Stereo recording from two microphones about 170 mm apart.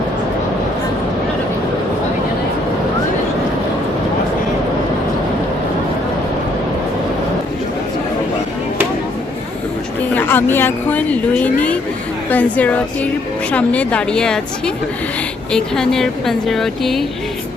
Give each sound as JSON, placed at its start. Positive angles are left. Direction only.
{"t": 10.2, "sound": "speech", "side_deg": 10}
{"t": 15.5, "sound": "speech", "side_deg": 5}